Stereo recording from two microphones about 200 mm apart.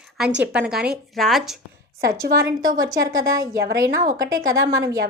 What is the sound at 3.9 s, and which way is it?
Speech, 40° right (ahead or behind).